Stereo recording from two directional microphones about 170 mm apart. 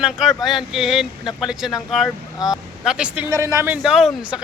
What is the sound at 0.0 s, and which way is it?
A man's voice, centre (ahead or behind).